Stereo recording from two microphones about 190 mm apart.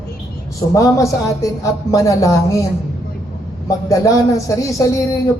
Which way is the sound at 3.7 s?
15° left (ahead or behind).